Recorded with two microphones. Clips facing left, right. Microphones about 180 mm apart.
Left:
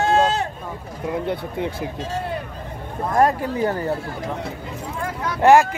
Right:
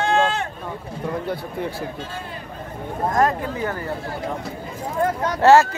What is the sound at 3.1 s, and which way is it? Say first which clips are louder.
Speech: left 4 dB; 35° left (ahead or behind).